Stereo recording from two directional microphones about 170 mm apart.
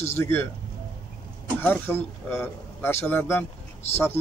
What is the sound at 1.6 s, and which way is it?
Speech, 10° left (ahead or behind).